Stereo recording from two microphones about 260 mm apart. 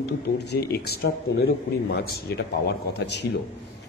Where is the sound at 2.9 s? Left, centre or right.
Left.